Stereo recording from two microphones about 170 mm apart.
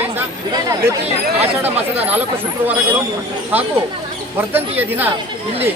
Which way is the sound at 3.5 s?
10° right (ahead or behind).